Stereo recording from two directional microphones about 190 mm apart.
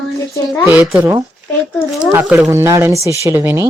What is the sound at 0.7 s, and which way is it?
Speech, 10° right (ahead or behind).